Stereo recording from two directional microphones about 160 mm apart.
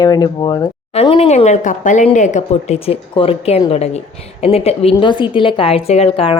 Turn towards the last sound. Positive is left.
turn(degrees=35)  # may be behind; listen again after turning